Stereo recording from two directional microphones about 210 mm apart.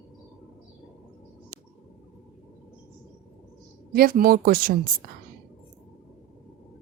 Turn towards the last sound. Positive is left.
turn(degrees=-40)  # may be behind; listen again after turning